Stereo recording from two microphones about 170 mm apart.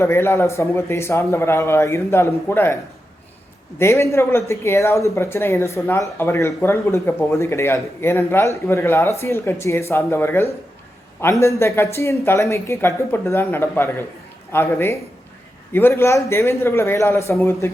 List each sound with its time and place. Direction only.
0.0 s speech: 15° left (ahead or behind)
3.8 s speech: 15° left (ahead or behind)